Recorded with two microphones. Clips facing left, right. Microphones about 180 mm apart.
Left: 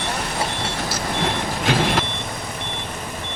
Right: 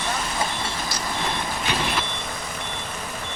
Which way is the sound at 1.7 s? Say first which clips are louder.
Left 8 dB; 90° left.